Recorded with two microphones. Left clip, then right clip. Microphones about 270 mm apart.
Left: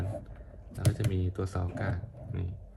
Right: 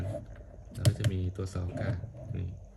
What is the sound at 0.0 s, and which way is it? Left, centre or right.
Typing, centre.